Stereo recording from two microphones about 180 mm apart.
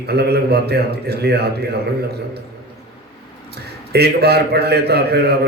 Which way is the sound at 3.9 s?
65° right (ahead or behind).